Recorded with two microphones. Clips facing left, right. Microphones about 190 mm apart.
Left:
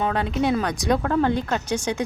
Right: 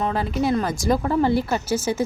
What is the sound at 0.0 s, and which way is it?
A woman's voice, centre (ahead or behind).